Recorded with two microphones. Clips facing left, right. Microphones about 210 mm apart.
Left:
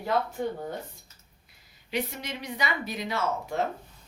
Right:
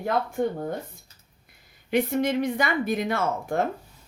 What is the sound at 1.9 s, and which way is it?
A woman's voice, 50° right (ahead or behind).